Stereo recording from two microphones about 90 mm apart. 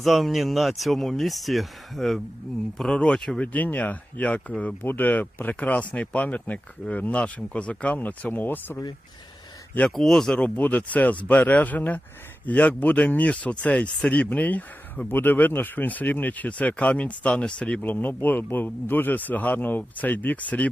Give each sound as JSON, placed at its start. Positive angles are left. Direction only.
{"t": 0.0, "sound": "speech", "side_deg": 0}
{"t": 9.9, "sound": "speech", "side_deg": 5}